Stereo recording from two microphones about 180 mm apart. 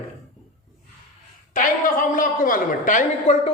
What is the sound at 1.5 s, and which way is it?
A man's voice, 50° left (ahead or behind).